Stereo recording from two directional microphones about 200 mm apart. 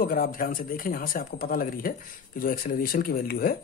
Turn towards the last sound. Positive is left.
turn(degrees=50)  # may be behind; listen again after turning